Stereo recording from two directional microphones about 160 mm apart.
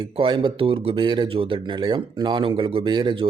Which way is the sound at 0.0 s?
30° right (ahead or behind).